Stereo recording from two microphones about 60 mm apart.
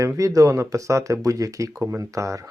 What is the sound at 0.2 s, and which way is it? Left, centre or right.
Speech, right.